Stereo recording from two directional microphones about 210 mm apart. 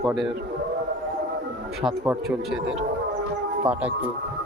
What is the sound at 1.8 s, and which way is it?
Speech, centre (ahead or behind).